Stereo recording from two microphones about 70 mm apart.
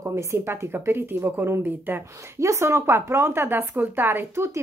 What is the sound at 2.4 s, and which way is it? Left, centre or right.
Speech, right.